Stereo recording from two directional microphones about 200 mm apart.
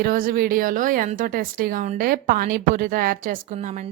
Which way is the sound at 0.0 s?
45° right (ahead or behind).